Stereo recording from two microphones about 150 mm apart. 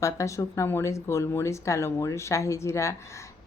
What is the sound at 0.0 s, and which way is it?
Speech, 20° left (ahead or behind).